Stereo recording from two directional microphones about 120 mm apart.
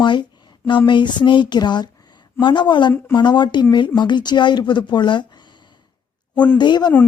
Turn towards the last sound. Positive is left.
turn(degrees=40)  # may be behind; listen again after turning